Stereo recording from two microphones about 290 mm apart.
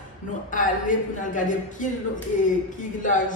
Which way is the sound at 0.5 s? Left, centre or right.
Left.